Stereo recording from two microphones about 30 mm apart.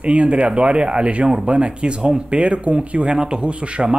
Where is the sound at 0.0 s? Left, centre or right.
Right.